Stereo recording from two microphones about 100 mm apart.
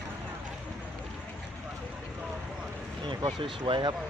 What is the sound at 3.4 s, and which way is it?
Speech, 60° right (ahead or behind).